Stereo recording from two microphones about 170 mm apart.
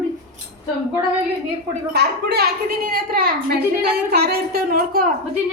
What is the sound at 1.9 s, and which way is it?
A woman's voice, 70° right (ahead or behind).